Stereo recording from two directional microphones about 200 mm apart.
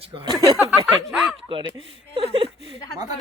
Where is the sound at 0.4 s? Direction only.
15° right (ahead or behind).